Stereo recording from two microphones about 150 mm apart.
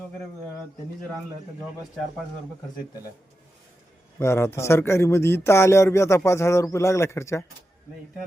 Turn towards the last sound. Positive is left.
turn(degrees=20)  # may be behind; listen again after turning